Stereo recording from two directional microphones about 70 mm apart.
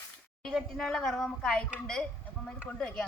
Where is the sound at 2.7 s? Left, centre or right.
Centre.